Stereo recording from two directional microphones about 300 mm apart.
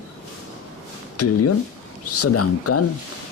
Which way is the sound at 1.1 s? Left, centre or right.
Left.